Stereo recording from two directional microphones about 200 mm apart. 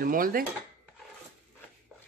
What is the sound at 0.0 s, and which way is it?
Speech, 45° right (ahead or behind).